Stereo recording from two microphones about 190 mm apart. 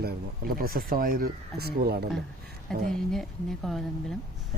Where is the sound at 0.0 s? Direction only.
50° right (ahead or behind).